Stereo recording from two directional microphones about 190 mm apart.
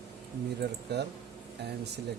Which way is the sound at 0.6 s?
60° right (ahead or behind).